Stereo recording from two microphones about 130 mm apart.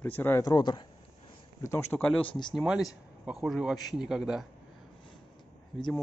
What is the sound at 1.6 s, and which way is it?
Speech, 20° left (ahead or behind).